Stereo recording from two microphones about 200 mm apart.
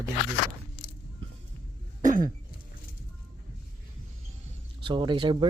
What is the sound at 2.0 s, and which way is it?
Cough, 40° right (ahead or behind).